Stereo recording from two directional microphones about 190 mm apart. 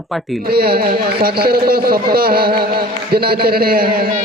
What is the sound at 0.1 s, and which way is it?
Speech, centre (ahead or behind).